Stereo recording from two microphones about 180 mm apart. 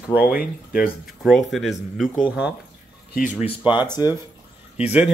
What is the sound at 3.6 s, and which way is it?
Speech, 25° left (ahead or behind).